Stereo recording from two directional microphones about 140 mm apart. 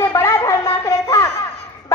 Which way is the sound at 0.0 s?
20° left (ahead or behind).